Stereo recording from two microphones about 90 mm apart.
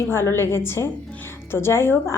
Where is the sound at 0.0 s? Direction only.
30° left (ahead or behind).